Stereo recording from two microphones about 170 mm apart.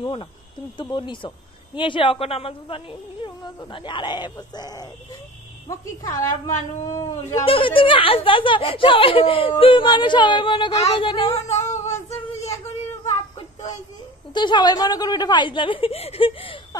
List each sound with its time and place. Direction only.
0.0 s a woman's voice: 30° left (ahead or behind)
7.4 s speech: 30° left (ahead or behind)
11.8 s female singing: 40° left (ahead or behind)
14.3 s a woman's voice: 25° left (ahead or behind)